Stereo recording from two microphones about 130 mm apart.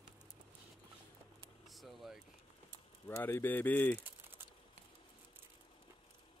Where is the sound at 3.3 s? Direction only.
15° left (ahead or behind).